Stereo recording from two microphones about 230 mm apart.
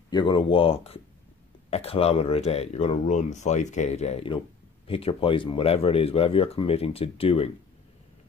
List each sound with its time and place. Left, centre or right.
0.1 s speech: centre